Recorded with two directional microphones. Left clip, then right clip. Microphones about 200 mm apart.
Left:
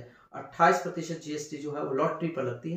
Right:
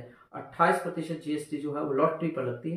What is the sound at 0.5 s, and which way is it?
Speech, 5° right (ahead or behind).